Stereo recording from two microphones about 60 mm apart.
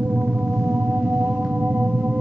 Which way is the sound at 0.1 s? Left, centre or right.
Right.